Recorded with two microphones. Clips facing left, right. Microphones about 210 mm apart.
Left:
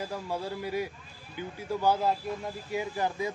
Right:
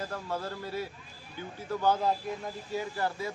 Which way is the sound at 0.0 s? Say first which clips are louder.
Left 1 dB; 10° left (ahead or behind).